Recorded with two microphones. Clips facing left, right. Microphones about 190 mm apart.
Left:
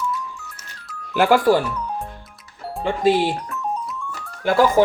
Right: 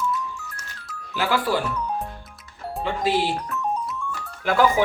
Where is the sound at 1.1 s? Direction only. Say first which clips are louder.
Left 8 dB; 50° left (ahead or behind).